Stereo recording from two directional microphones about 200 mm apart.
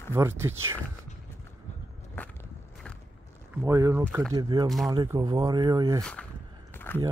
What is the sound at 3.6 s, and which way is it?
Speech, 15° right (ahead or behind).